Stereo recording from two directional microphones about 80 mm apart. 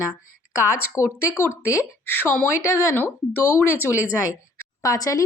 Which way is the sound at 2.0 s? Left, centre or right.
Left.